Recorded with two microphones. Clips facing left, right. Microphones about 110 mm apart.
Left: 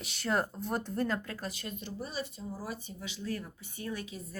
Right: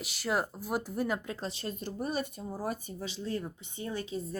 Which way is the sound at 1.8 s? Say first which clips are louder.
Right 6 dB; 50° right (ahead or behind).